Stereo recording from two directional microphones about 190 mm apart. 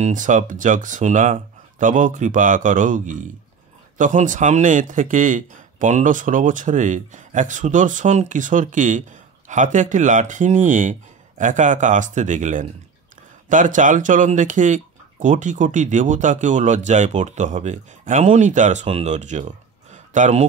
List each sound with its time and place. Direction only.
0.0 s speech: 40° right (ahead or behind)